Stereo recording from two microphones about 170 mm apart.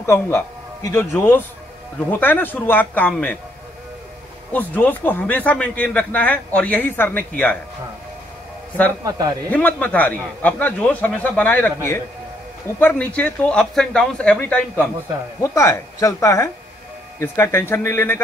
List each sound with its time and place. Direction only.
0.0 s a man's voice: 15° left (ahead or behind)
4.5 s a man's voice: 10° left (ahead or behind)
9.5 s a man's voice: 10° left (ahead or behind)